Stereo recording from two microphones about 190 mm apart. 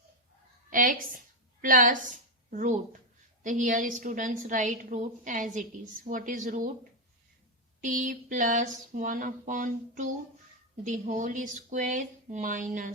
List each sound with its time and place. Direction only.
0.7 s a woman's voice: 45° right (ahead or behind)
7.9 s a woman's voice: 45° right (ahead or behind)